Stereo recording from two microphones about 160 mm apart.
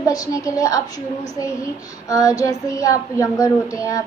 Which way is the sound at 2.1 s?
20° left (ahead or behind).